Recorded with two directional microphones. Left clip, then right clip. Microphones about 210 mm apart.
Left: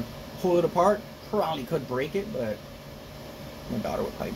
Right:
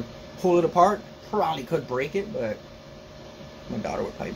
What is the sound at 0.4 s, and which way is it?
A man's voice, 15° right (ahead or behind).